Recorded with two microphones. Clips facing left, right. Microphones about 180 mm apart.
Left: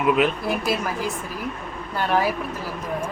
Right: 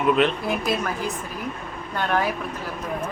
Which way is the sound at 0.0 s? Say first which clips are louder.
Even; 5° left (ahead or behind).